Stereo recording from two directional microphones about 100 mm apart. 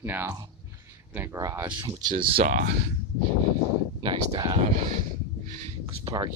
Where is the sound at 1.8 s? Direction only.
55° right (ahead or behind).